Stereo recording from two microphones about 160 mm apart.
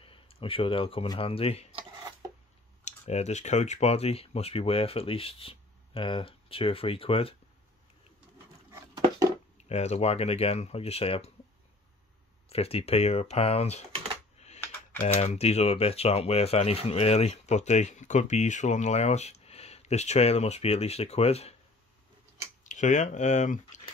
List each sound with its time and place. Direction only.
0.0 s speech: 35° left (ahead or behind)
2.8 s speech: 45° left (ahead or behind)
8.7 s a sound: 20° right (ahead or behind)
9.6 s speech: 45° left (ahead or behind)
12.4 s speech: 40° left (ahead or behind)
14.6 s typing: 15° left (ahead or behind)
15.0 s speech: 40° left (ahead or behind)
22.6 s speech: 50° left (ahead or behind)